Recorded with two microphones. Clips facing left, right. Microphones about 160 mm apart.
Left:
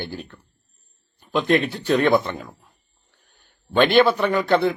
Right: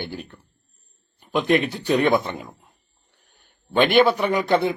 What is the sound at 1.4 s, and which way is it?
Speech, 15° right (ahead or behind).